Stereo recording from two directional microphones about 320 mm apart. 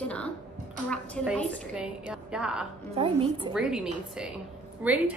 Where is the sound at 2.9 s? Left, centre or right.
Centre.